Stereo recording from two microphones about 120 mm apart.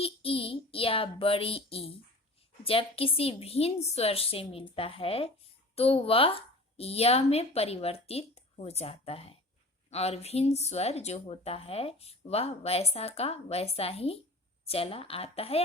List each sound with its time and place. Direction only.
0.0 s child singing: 50° left (ahead or behind)
2.6 s a woman's voice: 50° left (ahead or behind)